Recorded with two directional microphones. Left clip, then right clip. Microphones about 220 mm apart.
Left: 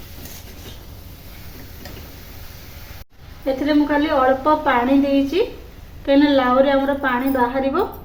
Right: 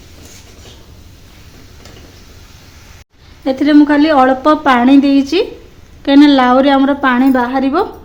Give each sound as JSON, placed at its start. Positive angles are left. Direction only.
{"t": 3.4, "sound": "a woman's voice", "side_deg": -50}